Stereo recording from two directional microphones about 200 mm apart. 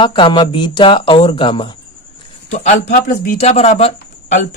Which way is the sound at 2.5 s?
35° left (ahead or behind).